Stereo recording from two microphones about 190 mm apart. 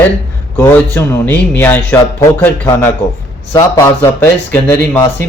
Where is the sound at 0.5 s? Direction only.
10° left (ahead or behind).